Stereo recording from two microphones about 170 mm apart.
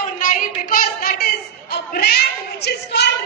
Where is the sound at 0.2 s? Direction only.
50° left (ahead or behind).